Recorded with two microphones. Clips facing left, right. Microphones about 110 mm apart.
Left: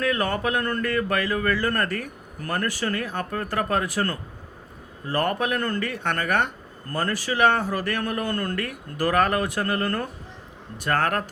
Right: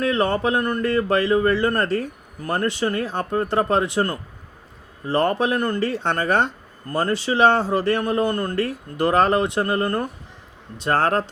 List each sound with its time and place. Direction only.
0.0 s speech: 25° right (ahead or behind)